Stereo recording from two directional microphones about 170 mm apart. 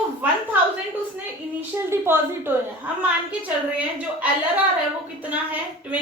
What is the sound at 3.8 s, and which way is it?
A woman's voice, 10° right (ahead or behind).